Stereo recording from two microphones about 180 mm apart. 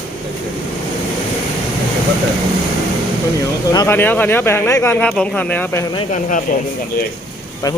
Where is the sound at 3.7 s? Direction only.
15° left (ahead or behind).